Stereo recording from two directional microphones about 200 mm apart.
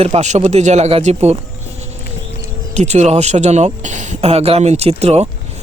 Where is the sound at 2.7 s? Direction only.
35° right (ahead or behind).